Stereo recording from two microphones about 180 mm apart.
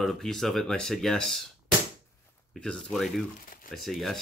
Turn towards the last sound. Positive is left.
turn(degrees=0)  # may be behind; listen again after turning